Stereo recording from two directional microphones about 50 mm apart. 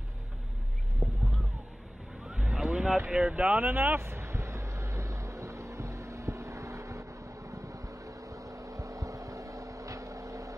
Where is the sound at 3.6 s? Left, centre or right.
Right.